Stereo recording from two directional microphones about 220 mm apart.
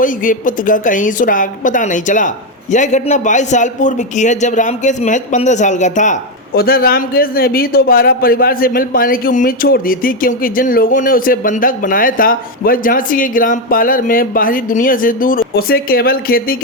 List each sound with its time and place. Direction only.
0.0 s a woman's voice: 40° left (ahead or behind)